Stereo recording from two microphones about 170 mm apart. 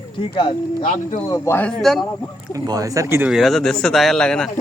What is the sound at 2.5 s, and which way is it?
Speech, 20° right (ahead or behind).